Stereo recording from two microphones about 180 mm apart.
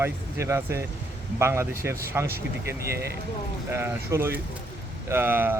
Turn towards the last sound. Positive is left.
turn(degrees=-10)  # may be behind; listen again after turning